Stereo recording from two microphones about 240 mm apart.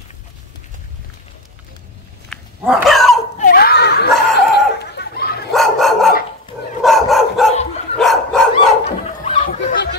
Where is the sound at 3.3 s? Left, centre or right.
Left.